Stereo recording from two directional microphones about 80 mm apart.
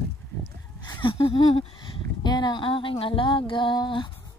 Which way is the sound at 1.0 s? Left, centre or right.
Left.